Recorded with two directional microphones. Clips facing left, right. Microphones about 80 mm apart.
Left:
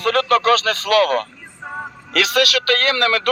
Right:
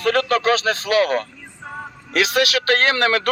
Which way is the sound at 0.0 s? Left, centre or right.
Left.